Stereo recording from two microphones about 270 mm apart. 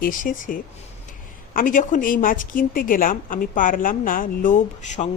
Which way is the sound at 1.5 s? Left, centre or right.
Left.